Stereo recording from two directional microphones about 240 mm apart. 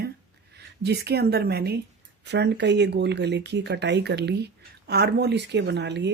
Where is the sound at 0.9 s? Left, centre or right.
Right.